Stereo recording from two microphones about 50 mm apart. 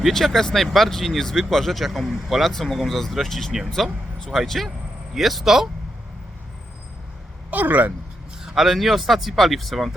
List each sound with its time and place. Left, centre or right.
0.0 s speech: centre
7.5 s speech: right
8.4 s speech: centre